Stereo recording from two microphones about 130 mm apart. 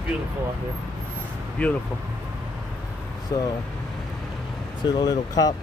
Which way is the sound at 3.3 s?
25° left (ahead or behind).